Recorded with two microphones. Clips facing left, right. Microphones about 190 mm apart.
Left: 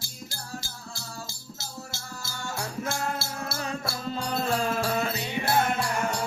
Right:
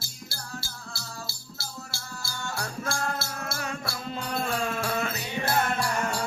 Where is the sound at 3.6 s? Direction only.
30° left (ahead or behind).